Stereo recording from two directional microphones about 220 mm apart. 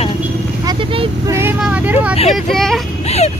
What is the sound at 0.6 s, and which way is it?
Speech, 25° right (ahead or behind).